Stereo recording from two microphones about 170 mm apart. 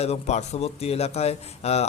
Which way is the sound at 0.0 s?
40° left (ahead or behind).